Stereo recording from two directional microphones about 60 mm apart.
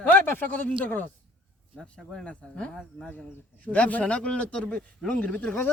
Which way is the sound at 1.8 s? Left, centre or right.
Centre.